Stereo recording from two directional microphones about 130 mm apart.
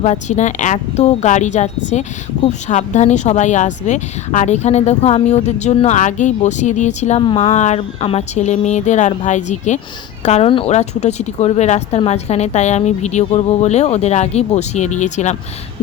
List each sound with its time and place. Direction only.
0.0 s speech: 65° left (ahead or behind)
7.2 s speech: 40° left (ahead or behind)
7.6 s speech: 55° left (ahead or behind)